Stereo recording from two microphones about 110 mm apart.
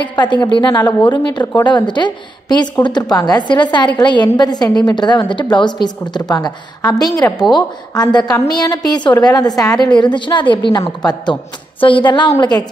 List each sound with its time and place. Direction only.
0.1 s a woman's voice: 40° left (ahead or behind)